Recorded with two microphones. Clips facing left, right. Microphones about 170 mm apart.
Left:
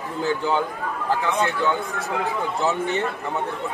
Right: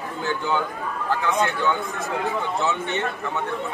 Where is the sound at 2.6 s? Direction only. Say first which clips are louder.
Left 6 dB; 35° left (ahead or behind).